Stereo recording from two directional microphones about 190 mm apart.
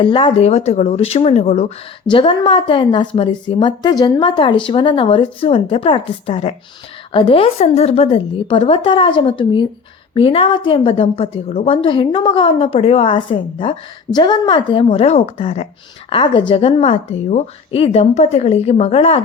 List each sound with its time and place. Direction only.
0.0 s a woman's voice: 25° left (ahead or behind)